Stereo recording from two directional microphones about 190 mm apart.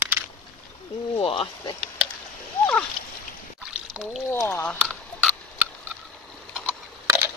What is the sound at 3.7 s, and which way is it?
Splash, 5° right (ahead or behind).